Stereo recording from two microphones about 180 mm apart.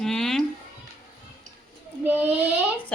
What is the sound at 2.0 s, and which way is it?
Speech, 10° right (ahead or behind).